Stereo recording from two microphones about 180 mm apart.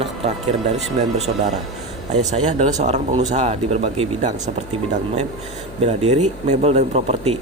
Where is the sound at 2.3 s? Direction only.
40° right (ahead or behind).